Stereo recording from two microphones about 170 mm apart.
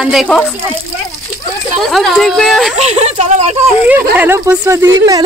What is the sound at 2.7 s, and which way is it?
Speech, 40° right (ahead or behind).